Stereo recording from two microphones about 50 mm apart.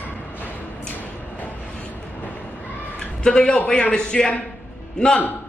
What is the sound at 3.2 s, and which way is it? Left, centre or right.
A man's voice, centre.